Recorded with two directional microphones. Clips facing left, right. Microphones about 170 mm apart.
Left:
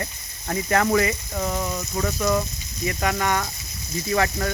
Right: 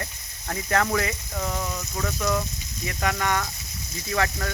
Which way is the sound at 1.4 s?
20° left (ahead or behind).